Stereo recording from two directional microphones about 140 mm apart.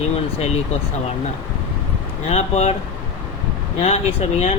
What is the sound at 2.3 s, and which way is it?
Speech, 50° left (ahead or behind).